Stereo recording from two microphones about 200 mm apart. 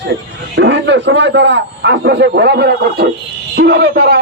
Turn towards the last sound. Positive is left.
turn(degrees=-55)  # may be behind; listen again after turning